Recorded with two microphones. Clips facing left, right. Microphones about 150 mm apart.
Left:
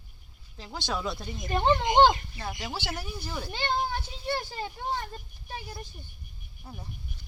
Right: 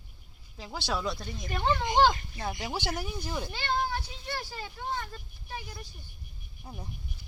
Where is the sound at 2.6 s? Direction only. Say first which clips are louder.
Right 2 dB; 15° right (ahead or behind).